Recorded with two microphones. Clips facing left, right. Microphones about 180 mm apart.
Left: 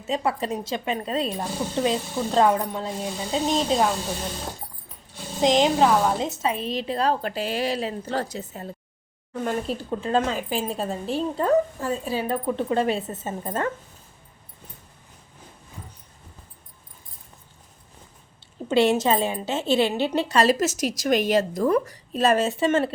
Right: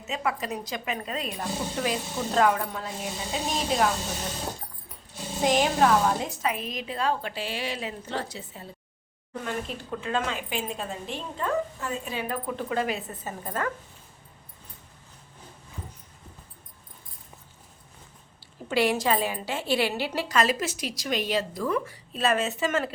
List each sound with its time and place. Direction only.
0.1 s speech: 30° left (ahead or behind)
5.4 s a woman's voice: 20° left (ahead or behind)
18.7 s a woman's voice: 25° left (ahead or behind)